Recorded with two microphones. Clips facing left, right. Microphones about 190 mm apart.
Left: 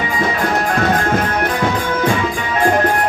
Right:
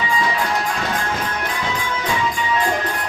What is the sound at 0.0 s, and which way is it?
Music, 55° left (ahead or behind).